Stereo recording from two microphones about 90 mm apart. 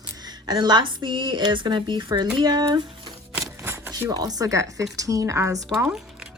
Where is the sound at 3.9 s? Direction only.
45° right (ahead or behind).